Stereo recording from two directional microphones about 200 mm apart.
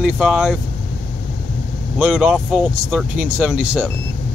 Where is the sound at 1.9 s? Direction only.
5° right (ahead or behind).